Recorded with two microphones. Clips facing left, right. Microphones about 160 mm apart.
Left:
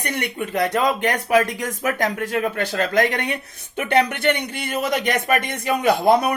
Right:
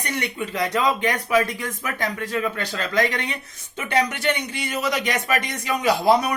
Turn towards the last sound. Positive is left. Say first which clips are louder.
# left 2 dB
turn(degrees=55)  # may be behind; listen again after turning